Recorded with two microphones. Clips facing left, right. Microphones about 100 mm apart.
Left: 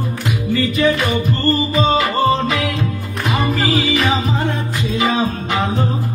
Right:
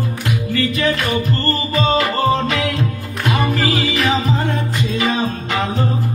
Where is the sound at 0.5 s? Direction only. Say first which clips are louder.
Left 3 dB; 15° left (ahead or behind).